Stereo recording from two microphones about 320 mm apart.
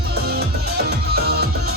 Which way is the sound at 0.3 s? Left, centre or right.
Right.